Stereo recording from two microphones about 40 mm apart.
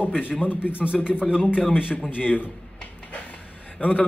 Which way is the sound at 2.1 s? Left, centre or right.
Left.